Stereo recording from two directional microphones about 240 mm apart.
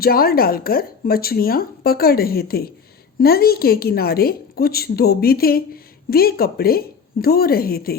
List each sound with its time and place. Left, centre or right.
0.0 s a woman's voice: left